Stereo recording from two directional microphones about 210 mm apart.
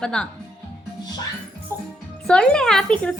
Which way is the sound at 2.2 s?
5° left (ahead or behind).